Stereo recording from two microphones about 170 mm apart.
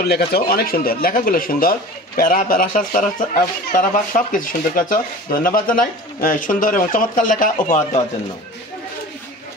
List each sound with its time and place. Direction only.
0.0 s speech: 70° left (ahead or behind); by 7.6 s 55° left (ahead or behind)